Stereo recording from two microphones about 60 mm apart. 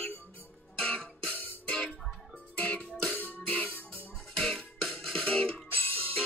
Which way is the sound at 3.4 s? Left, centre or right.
Left.